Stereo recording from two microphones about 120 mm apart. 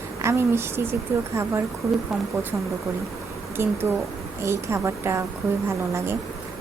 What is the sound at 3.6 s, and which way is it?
A woman's voice, 20° right (ahead or behind).